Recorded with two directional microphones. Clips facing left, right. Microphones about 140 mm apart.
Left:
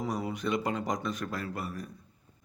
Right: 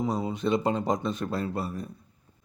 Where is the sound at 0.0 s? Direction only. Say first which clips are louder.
Right 5 dB; 20° right (ahead or behind).